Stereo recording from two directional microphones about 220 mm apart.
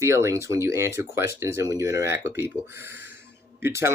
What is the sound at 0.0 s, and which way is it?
Speech, 15° right (ahead or behind).